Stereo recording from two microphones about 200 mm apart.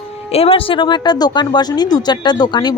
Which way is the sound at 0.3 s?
30° left (ahead or behind).